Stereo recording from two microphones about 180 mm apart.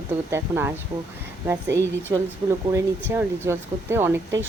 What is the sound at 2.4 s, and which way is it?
A woman's voice, 20° right (ahead or behind).